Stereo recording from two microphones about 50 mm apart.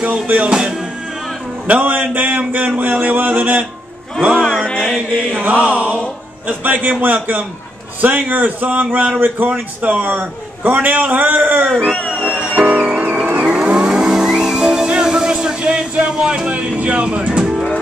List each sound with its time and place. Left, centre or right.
0.0 s music: right
1.7 s a man's voice: right
4.3 s a sound: centre
5.1 s chant: left
5.7 s music: right
6.4 s a man's voice: right
11.8 s music: left
12.3 s music: right
13.4 s vehicle: centre